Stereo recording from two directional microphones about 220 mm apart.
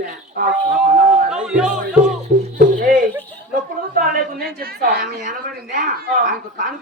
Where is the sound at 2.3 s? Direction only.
35° right (ahead or behind).